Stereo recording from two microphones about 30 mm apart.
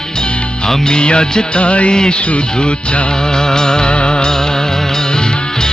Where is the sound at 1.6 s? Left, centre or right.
Left.